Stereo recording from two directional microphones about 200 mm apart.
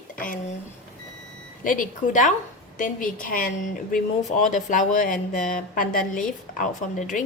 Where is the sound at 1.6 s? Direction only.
40° left (ahead or behind).